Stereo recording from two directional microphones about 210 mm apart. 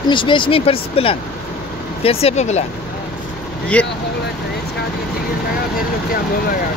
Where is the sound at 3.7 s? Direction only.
5° left (ahead or behind).